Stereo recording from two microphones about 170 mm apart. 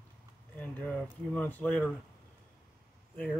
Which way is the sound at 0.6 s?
10° left (ahead or behind).